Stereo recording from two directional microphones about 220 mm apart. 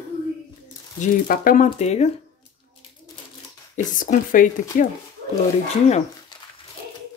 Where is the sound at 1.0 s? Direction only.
35° left (ahead or behind).